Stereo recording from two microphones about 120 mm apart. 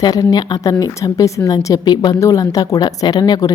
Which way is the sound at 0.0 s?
30° left (ahead or behind).